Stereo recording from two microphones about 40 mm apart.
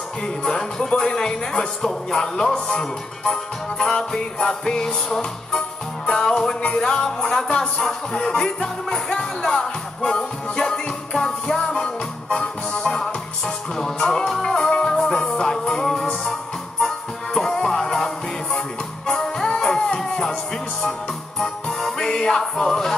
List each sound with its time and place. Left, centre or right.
0.4 s speech: centre
4.4 s music: centre
6.8 s speech: centre
7.8 s music: centre
21.4 s music: centre